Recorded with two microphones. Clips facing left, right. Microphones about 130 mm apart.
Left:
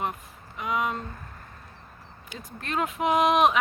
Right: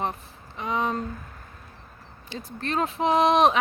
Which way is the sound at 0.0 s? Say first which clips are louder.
Right 2 dB; 30° right (ahead or behind).